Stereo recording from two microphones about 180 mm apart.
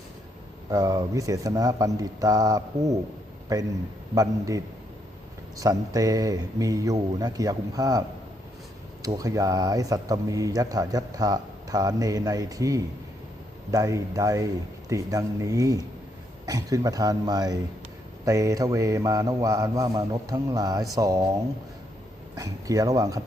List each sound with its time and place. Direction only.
0.7 s speech: 20° right (ahead or behind)
22.4 s speech: 20° right (ahead or behind)